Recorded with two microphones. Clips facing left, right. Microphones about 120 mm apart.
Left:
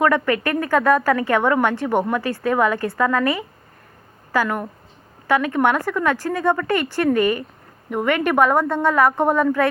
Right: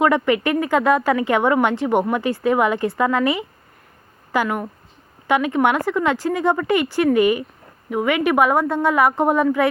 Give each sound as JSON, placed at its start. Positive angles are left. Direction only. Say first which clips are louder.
{"t": 0.0, "sound": "a woman's voice", "louder": "right 1 dB", "side_deg": -15}
{"t": 4.4, "sound": "a woman's voice", "louder": "right 1 dB", "side_deg": -5}
{"t": 5.3, "sound": "a woman's voice", "louder": "even", "side_deg": -15}